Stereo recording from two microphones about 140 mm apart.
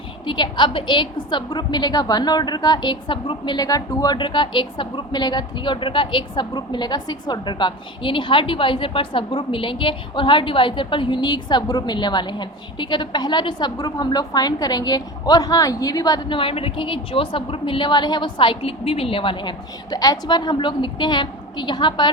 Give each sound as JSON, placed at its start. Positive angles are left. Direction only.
{"t": 0.3, "sound": "a woman's voice", "side_deg": 35}